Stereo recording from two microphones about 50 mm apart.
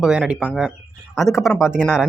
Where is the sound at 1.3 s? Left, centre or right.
Centre.